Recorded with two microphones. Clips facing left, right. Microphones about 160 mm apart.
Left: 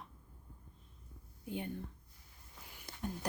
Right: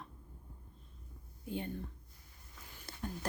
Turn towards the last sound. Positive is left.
turn(degrees=15)  # may be behind; listen again after turning